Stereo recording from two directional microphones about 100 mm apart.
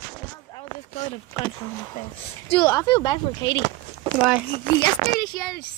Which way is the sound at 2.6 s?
35° left (ahead or behind).